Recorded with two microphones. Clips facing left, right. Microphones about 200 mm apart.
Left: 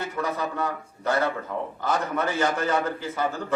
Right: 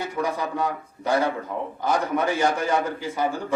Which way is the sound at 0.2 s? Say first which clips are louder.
Right 2 dB; 15° right (ahead or behind).